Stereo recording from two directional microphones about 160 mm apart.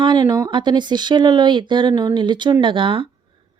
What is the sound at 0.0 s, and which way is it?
Speech, 25° right (ahead or behind).